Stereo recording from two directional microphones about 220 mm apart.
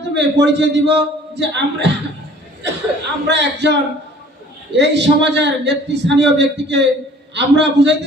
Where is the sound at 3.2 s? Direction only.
50° right (ahead or behind).